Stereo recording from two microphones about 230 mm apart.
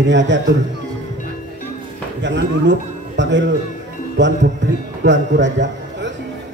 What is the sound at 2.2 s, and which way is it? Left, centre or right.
A man's voice, right.